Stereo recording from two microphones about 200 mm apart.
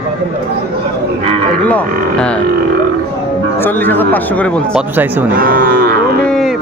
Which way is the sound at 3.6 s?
10° left (ahead or behind).